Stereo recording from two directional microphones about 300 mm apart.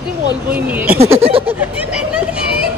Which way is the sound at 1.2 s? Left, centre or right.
Centre.